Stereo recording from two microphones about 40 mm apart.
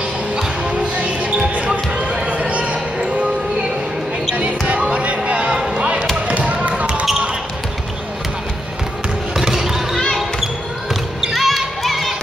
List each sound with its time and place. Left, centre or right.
1.0 s basketball bounce: right
2.0 s a sound: right
4.4 s basketball bounce: right
9.4 s basketball bounce: centre